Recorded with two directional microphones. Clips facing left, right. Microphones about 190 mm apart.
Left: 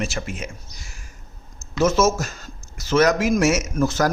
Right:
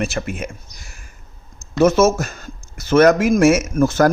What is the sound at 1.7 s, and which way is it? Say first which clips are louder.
Speech: right 5 dB; 60° right (ahead or behind).